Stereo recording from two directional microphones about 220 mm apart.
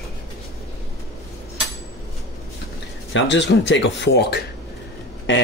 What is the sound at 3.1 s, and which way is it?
Speech, 55° left (ahead or behind).